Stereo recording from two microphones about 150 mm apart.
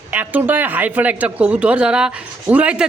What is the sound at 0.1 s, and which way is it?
Speech, 10° right (ahead or behind).